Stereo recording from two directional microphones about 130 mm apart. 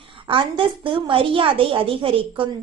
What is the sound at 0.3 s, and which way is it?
A woman's voice, 40° right (ahead or behind).